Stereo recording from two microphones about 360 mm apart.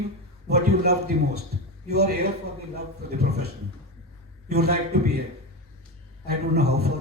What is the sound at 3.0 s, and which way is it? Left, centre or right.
Speech, right.